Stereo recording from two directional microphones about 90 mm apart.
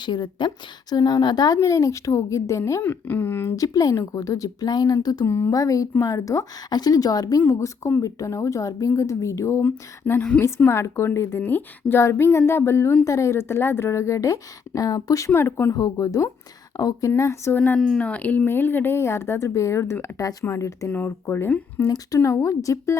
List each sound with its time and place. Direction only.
0.0 s a woman's voice: 55° left (ahead or behind)
1.6 s a woman's voice: 35° left (ahead or behind)
2.8 s speech: 20° left (ahead or behind)
3.5 s a woman's voice: 40° left (ahead or behind)
5.2 s a woman's voice: 35° left (ahead or behind)
7.4 s a woman's voice: 30° left (ahead or behind)
9.6 s a woman's voice: 20° left (ahead or behind); by 15.3 s 40° left (ahead or behind)
15.3 s speech: 25° left (ahead or behind)
15.7 s a woman's voice: 40° left (ahead or behind)
17.5 s a woman's voice: 20° left (ahead or behind)
21.8 s a woman's voice: 45° left (ahead or behind)